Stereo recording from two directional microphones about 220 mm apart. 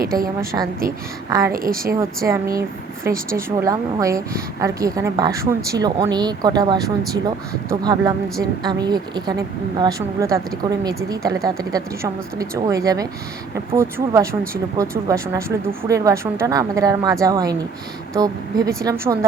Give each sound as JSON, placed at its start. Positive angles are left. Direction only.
{"t": 0.0, "sound": "a woman's voice", "side_deg": -40}
{"t": 1.3, "sound": "a woman's voice", "side_deg": -15}
{"t": 1.5, "sound": "a woman's voice", "side_deg": -40}
{"t": 2.0, "sound": "a woman's voice", "side_deg": -15}